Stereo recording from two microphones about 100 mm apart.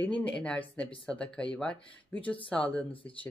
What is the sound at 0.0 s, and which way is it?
Speech, 15° left (ahead or behind).